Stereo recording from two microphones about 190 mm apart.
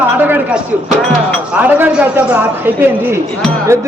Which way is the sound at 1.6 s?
10° right (ahead or behind).